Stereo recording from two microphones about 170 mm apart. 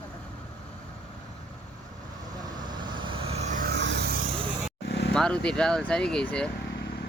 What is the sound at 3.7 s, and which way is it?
Vehicle, 80° right.